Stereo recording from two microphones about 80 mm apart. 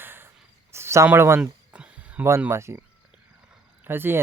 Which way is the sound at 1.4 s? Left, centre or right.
Centre.